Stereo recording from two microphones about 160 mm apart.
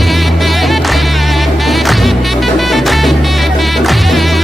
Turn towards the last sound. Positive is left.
turn(degrees=0)  # may be behind; listen again after turning